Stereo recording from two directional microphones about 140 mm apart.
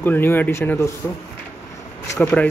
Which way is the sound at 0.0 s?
15° left (ahead or behind).